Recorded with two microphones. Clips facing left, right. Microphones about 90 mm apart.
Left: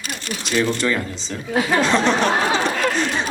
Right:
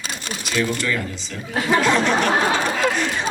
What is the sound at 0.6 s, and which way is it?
Speech, 30° left (ahead or behind).